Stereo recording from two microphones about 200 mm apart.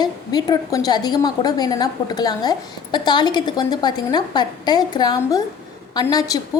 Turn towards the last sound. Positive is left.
turn(degrees=20)  # may be behind; listen again after turning